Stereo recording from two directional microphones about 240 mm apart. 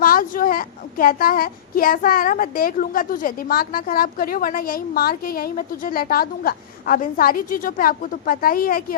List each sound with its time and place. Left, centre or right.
0.0 s a woman's voice: left